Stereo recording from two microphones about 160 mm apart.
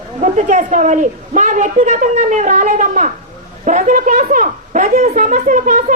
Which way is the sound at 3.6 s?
50° right (ahead or behind).